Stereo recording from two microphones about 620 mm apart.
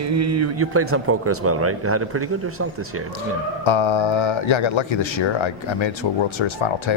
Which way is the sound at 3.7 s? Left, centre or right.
Left.